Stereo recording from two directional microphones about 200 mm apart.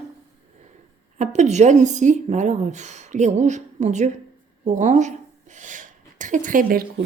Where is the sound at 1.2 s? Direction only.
35° right (ahead or behind).